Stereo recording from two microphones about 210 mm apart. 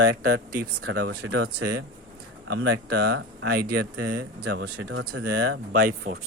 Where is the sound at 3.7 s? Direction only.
90° right.